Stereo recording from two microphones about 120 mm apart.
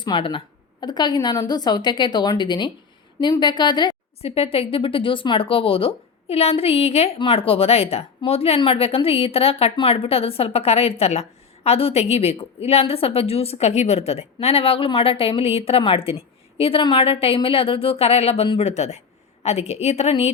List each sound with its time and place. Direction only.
0.0 s a woman's voice: 40° left (ahead or behind)
4.2 s a woman's voice: 55° left (ahead or behind)